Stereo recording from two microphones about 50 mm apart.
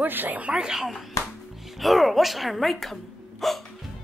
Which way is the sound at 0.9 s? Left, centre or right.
Centre.